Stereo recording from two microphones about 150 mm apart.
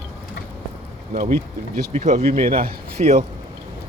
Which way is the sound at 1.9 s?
50° right (ahead or behind).